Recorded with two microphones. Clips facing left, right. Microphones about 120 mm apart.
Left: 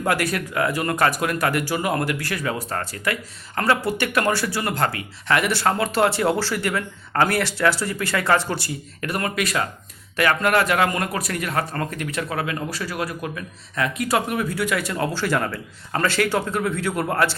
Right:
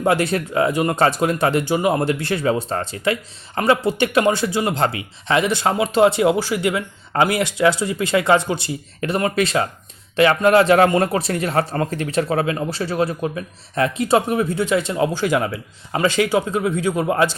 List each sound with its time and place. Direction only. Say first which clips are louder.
0.0 s speech: right 4 dB; 25° right (ahead or behind)